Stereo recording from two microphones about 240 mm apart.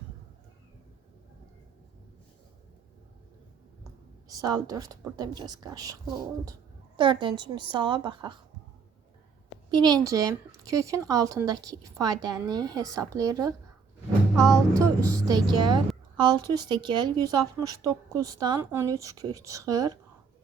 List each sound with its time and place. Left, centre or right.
4.4 s a woman's voice: centre
9.7 s a woman's voice: centre
14.5 s a woman's voice: centre